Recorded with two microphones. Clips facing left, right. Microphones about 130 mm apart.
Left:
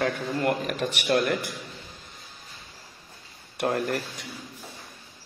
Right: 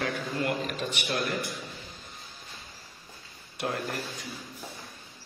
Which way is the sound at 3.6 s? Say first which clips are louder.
Left 6 dB; 55° left (ahead or behind).